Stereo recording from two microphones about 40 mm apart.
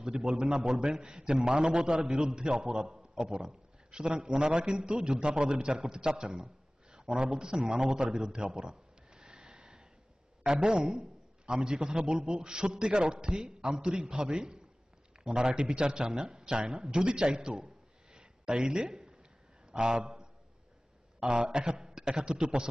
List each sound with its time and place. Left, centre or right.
0.0 s a man's voice: centre
6.4 s a sound: centre
10.4 s a man's voice: right
18.1 s a sound: right
19.7 s a man's voice: right
21.3 s a man's voice: right
21.5 s a man's voice: right